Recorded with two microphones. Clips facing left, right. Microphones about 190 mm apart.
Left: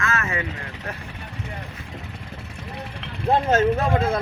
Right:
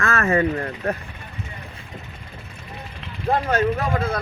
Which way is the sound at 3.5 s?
25° left (ahead or behind).